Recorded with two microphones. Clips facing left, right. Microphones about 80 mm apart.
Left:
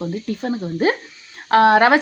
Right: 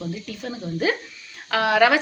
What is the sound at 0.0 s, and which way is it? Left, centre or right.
A woman's voice, left.